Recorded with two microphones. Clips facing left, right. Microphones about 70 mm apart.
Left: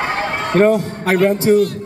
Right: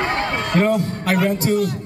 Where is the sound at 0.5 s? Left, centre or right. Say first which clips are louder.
Left 6 dB; left.